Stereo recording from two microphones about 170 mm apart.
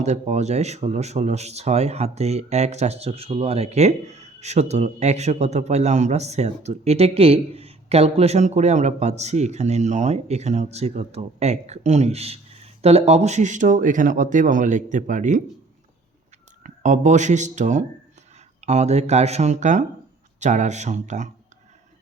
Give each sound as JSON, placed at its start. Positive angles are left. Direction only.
{"t": 0.0, "sound": "speech", "side_deg": -40}
{"t": 16.6, "sound": "speech", "side_deg": -45}